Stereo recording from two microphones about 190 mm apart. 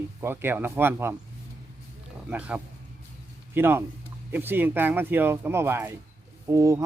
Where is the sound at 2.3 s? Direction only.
5° right (ahead or behind).